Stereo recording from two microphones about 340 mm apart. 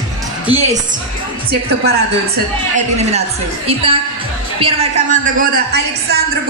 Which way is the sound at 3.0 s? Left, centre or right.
Centre.